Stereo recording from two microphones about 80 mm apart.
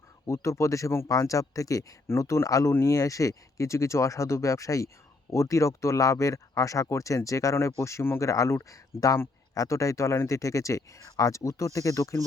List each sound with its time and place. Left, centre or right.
0.3 s speech: left